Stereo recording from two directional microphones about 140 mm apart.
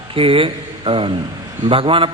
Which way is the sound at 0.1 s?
40° right (ahead or behind).